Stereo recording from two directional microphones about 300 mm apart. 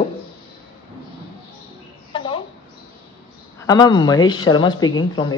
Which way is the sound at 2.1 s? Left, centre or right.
Centre.